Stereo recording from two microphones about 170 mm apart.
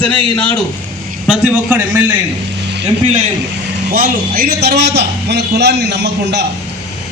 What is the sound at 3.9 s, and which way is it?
A man's voice, 60° right (ahead or behind).